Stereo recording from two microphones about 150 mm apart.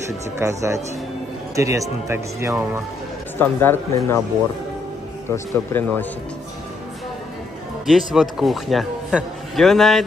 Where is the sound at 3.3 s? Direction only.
15° left (ahead or behind).